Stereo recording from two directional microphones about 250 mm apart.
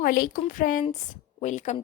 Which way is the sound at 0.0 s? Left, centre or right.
Left.